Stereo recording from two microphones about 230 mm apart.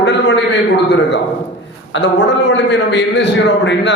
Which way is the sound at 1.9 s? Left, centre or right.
Left.